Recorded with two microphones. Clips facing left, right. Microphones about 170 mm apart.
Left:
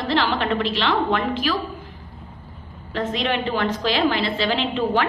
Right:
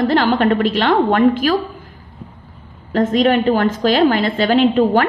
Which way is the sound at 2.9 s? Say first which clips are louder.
Right 10 dB; 45° right (ahead or behind).